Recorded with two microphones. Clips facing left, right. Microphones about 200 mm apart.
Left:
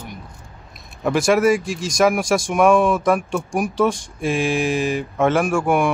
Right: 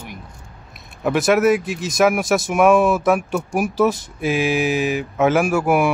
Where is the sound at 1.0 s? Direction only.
Centre (ahead or behind).